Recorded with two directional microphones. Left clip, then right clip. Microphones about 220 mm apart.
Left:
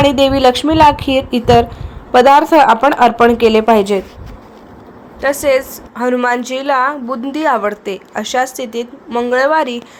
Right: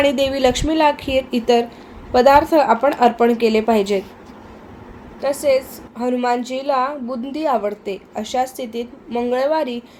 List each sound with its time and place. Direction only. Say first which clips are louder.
0.0 s speech: left 6 dB; 20° left (ahead or behind)
5.2 s a woman's voice: left 4 dB; 15° left (ahead or behind)